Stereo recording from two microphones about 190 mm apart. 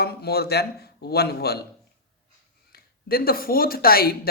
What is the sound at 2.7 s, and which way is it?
Speech, 50° left (ahead or behind).